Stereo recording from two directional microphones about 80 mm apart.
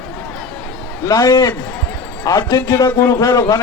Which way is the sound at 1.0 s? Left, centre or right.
Left.